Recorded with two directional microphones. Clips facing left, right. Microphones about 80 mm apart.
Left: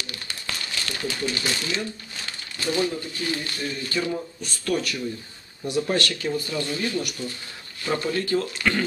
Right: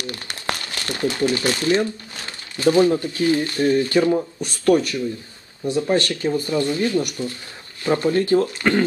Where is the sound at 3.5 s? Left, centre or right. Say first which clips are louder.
Right 11 dB; right.